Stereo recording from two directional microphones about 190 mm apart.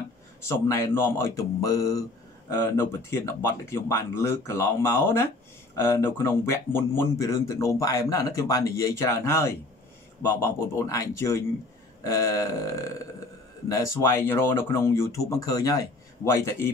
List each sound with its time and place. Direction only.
0.4 s speech: 15° left (ahead or behind)
3.1 s speech: 15° left (ahead or behind)